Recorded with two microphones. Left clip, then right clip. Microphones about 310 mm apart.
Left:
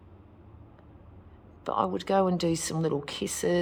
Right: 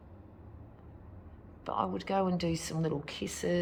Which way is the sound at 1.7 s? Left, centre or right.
Left.